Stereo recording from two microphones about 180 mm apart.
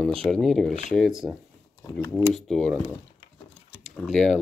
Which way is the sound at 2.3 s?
Centre (ahead or behind).